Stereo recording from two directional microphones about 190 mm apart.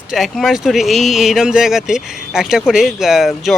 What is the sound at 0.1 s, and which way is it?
Speech, centre (ahead or behind).